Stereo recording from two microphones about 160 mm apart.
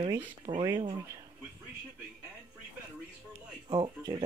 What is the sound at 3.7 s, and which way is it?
Speech, 30° right (ahead or behind).